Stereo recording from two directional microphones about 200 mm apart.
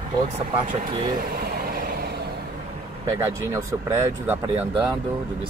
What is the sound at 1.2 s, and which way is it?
Vehicle, 45° right (ahead or behind).